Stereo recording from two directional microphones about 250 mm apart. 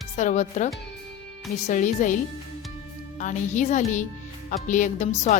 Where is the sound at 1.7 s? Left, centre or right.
Left.